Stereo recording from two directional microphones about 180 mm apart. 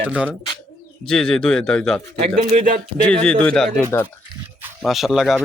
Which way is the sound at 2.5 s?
45° right (ahead or behind).